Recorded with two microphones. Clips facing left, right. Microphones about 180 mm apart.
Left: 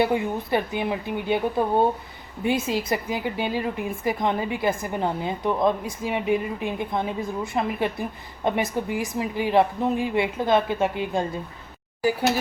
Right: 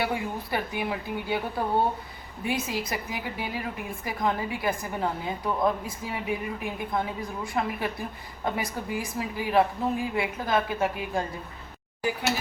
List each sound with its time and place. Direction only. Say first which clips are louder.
0.0 s a woman's voice: left 7 dB; 25° left (ahead or behind)